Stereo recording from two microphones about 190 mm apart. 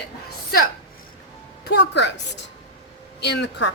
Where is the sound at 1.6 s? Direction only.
65° left (ahead or behind).